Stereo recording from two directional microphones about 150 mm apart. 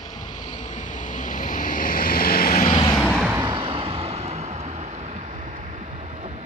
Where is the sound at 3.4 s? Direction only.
35° right (ahead or behind).